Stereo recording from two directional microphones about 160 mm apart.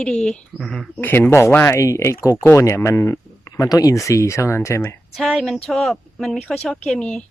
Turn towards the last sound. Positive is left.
turn(degrees=5)  # may be behind; listen again after turning